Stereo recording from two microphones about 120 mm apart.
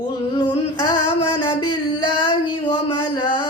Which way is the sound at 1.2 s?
40° left (ahead or behind).